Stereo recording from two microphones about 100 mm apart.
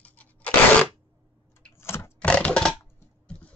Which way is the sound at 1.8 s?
25° left (ahead or behind).